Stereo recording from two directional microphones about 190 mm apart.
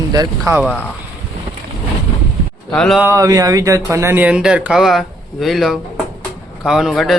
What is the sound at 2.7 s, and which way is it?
Speech, 5° left (ahead or behind).